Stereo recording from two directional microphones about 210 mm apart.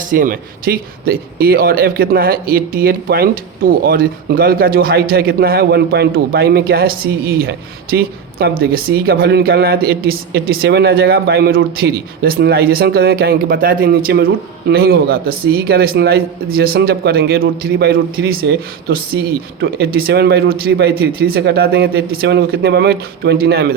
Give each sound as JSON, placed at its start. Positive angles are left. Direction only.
{"t": 0.0, "sound": "speech", "side_deg": -40}